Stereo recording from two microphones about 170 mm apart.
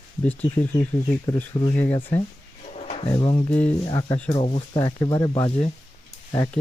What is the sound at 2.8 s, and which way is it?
Speech, 35° left (ahead or behind).